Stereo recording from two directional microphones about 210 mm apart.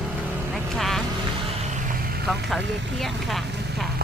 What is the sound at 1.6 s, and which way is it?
Vehicle, 35° right (ahead or behind).